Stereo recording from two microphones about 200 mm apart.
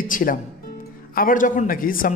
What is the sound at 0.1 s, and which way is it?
A woman's voice, 45° left (ahead or behind).